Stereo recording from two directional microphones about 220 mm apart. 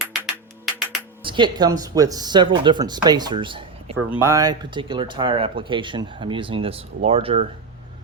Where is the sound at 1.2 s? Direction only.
20° right (ahead or behind).